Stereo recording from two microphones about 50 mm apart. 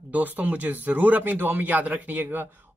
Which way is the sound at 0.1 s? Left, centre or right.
Right.